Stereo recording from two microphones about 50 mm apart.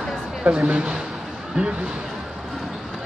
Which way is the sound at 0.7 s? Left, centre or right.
Centre.